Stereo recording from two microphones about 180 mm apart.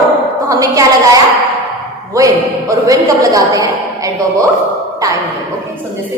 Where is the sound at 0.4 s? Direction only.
20° right (ahead or behind).